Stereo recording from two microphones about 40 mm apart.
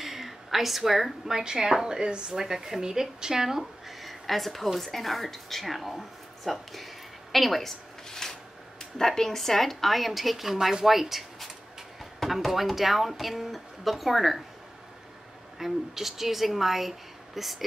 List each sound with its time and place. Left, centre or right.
0.0 s a woman's voice: centre
1.4 s a woman's voice: centre
7.3 s a sound: centre
8.9 s a woman's voice: centre
15.6 s a woman's voice: centre